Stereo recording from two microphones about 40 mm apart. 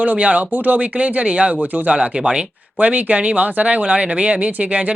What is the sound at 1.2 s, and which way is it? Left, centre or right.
Speech, right.